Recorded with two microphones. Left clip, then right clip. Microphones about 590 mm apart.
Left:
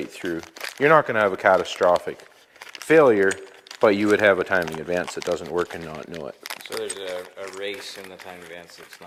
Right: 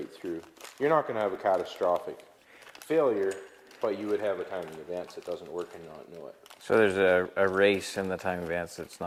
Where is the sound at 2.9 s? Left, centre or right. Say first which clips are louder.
Left 10 dB; left.